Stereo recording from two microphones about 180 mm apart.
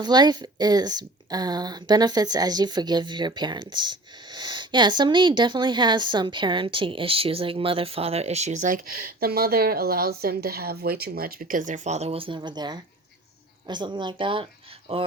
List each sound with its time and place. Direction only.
0.0 s speech: 25° right (ahead or behind)